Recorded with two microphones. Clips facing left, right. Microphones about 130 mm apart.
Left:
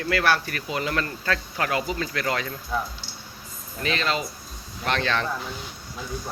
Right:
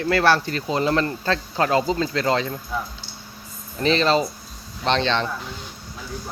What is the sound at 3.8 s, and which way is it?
Speech, 30° right (ahead or behind).